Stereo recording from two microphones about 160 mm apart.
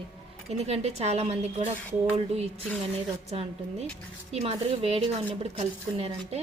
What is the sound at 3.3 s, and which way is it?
A woman's voice, 40° right (ahead or behind).